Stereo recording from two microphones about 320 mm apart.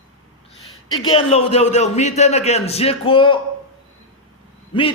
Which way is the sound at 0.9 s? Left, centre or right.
Centre.